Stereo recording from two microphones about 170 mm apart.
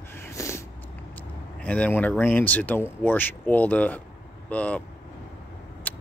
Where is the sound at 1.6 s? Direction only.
10° left (ahead or behind).